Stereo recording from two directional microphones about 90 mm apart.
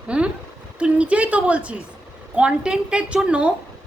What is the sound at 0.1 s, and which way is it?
A woman's voice, 10° right (ahead or behind).